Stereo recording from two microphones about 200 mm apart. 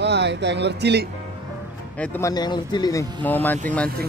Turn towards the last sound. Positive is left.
turn(degrees=5)  # may be behind; listen again after turning